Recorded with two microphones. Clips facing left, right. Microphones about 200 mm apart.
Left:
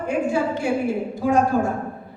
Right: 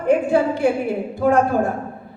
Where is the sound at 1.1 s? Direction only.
60° right (ahead or behind).